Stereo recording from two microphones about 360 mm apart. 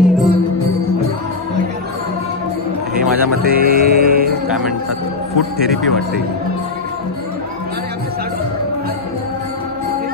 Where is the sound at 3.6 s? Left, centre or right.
Right.